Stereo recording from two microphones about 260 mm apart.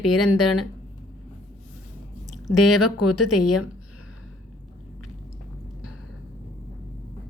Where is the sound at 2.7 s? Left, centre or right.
Left.